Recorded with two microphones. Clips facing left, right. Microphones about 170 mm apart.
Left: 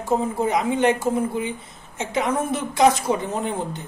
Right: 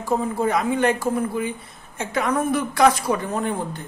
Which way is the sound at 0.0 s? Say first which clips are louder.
Even; 20° left (ahead or behind).